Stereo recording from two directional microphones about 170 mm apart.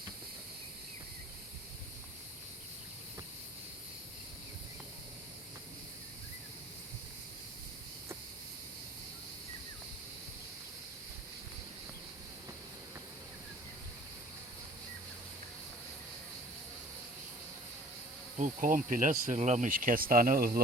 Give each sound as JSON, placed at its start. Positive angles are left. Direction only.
{"t": 18.3, "sound": "insect", "side_deg": -50}
{"t": 19.4, "sound": "speech", "side_deg": -45}